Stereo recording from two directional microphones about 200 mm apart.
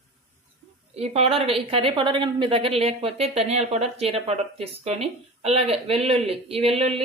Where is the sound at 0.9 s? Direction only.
30° right (ahead or behind).